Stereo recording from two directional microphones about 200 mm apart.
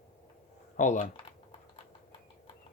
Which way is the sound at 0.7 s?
40° left (ahead or behind).